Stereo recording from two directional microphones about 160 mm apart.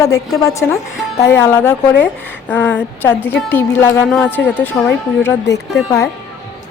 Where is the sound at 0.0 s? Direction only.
20° left (ahead or behind).